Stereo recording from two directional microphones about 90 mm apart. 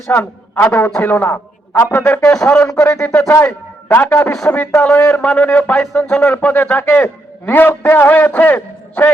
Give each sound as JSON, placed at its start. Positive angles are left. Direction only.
{"t": 0.1, "sound": "a man's voice", "side_deg": 20}
{"t": 3.8, "sound": "a man's voice", "side_deg": 20}